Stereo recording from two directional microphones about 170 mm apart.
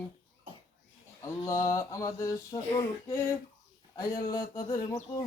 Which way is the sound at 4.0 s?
20° left (ahead or behind).